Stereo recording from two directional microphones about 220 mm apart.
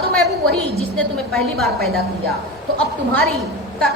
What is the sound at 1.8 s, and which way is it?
Speech, 45° right (ahead or behind).